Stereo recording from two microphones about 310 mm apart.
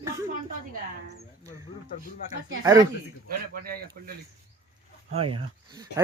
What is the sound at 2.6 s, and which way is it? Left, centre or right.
Speech, centre.